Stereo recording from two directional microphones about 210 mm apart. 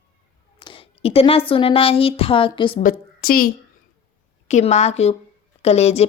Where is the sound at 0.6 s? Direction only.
25° left (ahead or behind).